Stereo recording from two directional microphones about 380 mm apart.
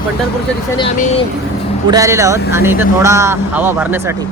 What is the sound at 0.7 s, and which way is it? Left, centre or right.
Speech, centre.